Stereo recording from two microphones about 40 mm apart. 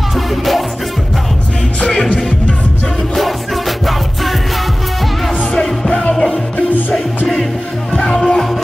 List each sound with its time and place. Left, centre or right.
0.1 s music: centre
1.9 s music: left
3.2 s music: centre
6.1 s music: centre
8.1 s music: centre